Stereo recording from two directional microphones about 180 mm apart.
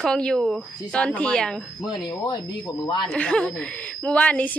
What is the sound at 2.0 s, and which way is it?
Speech, 25° left (ahead or behind).